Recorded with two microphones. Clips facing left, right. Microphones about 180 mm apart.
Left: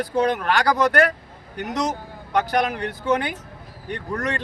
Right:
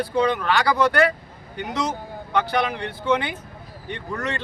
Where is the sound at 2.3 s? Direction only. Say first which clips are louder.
Left 1 dB; 40° left (ahead or behind).